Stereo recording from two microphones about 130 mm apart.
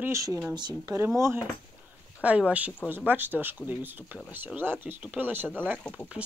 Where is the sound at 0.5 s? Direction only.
35° right (ahead or behind).